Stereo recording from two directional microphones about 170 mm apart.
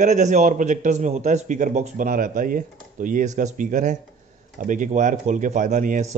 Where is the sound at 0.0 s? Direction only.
45° right (ahead or behind).